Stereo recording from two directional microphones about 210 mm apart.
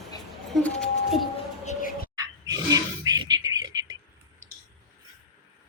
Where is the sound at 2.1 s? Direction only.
15° right (ahead or behind).